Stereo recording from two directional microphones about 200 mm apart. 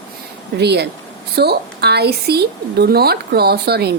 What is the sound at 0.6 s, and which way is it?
A woman's voice, 55° right (ahead or behind).